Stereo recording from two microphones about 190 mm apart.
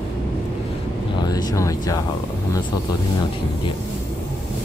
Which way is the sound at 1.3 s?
20° left (ahead or behind).